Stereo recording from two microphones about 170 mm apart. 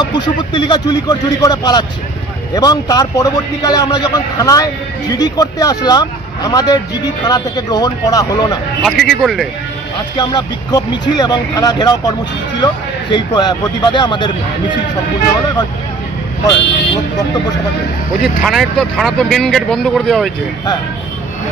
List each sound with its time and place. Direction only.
0.0 s a man's voice: 25° left (ahead or behind)
9.2 s speech: centre (ahead or behind)
10.1 s a man's voice: 25° left (ahead or behind)
16.4 s a man's voice: 25° left (ahead or behind)
18.2 s speech: centre (ahead or behind)